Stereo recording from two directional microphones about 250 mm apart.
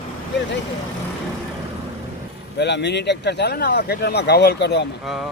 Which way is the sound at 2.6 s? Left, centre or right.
Left.